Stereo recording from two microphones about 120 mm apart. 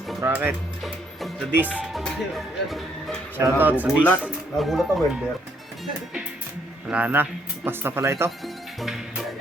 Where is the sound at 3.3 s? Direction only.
15° right (ahead or behind).